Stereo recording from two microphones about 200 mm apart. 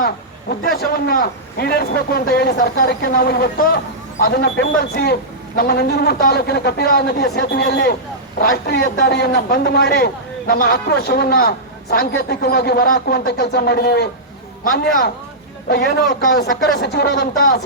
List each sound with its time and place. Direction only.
0.8 s a man's voice: 50° left (ahead or behind)
15.7 s a man's voice: 55° left (ahead or behind)